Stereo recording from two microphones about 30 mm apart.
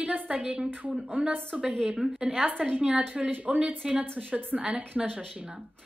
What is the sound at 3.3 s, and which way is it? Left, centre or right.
Speech, right.